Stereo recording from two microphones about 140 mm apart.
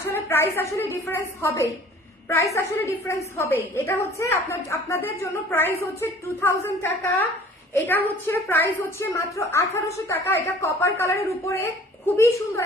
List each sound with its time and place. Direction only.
0.1 s a woman's voice: 20° left (ahead or behind)